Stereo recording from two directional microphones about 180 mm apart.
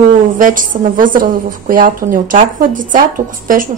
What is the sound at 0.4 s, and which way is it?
A woman's voice, 50° right (ahead or behind).